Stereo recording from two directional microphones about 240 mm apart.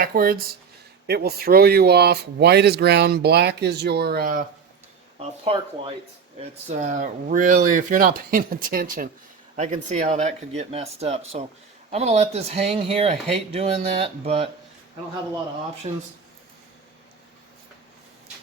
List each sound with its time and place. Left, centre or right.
0.0 s speech: right
5.2 s speech: right
15.9 s speech: right